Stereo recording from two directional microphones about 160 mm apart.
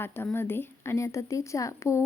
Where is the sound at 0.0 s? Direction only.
15° left (ahead or behind).